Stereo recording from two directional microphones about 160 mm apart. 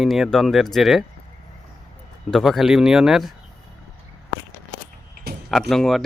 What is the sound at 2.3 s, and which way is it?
Speech, centre (ahead or behind).